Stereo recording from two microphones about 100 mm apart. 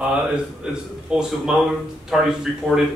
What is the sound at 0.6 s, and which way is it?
A man's voice, 10° right (ahead or behind).